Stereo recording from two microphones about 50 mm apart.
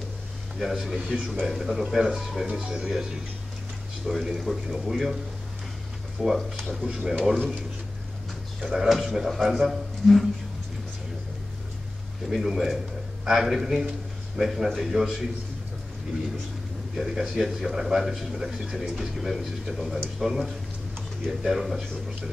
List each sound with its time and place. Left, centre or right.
0.6 s a man's voice: centre
2.9 s a man's voice: centre
6.1 s speech: centre
8.6 s a man's voice: centre
12.3 s a man's voice: centre
16.9 s a man's voice: centre